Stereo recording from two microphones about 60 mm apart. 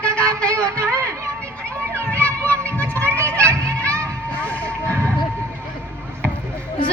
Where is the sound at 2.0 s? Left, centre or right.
Right.